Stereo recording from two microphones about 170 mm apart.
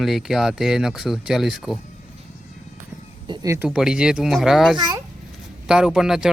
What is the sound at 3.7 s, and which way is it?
Speech, 5° right (ahead or behind).